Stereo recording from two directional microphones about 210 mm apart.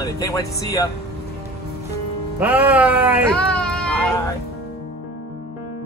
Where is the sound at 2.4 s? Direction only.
5° right (ahead or behind).